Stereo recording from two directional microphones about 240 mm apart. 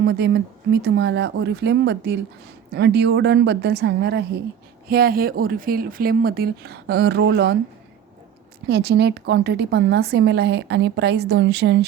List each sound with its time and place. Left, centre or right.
0.0 s a woman's voice: right
8.6 s a woman's voice: right